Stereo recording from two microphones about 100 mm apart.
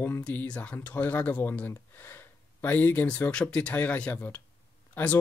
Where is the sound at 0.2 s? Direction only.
15° left (ahead or behind).